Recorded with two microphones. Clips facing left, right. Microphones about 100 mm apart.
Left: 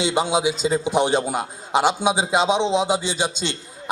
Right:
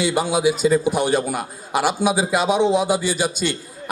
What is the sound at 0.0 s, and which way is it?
A man's voice, 20° left (ahead or behind).